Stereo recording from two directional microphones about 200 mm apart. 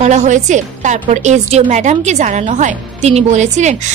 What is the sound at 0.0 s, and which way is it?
A woman's voice, 35° right (ahead or behind).